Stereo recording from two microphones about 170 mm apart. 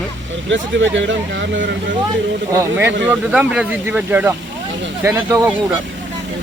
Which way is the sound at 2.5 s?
15° right (ahead or behind).